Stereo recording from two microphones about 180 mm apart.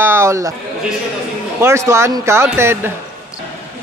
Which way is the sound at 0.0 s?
15° right (ahead or behind).